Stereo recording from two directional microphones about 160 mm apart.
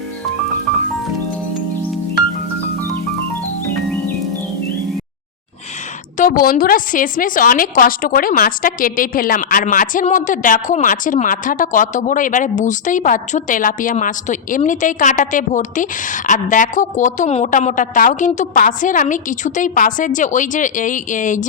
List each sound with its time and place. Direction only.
6.1 s a woman's voice: 60° left (ahead or behind)